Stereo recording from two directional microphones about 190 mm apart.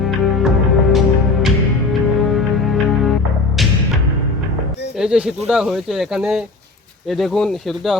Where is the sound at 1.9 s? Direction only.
Centre (ahead or behind).